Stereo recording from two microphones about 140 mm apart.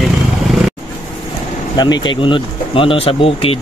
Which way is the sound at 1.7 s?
35° left (ahead or behind).